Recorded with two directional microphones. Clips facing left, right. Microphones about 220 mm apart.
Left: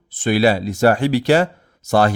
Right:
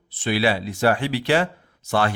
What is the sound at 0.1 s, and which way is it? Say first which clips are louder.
Speech: left 6 dB; 45° left (ahead or behind).